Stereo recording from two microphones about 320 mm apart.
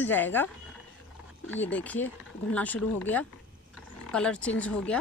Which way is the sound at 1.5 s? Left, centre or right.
Centre.